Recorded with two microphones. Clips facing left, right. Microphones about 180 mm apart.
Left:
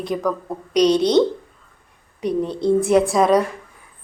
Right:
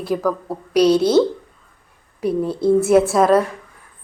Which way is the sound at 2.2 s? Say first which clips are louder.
Right 2 dB; 5° right (ahead or behind).